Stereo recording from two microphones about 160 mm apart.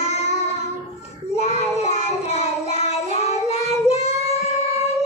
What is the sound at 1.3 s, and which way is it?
Child singing, 40° left (ahead or behind).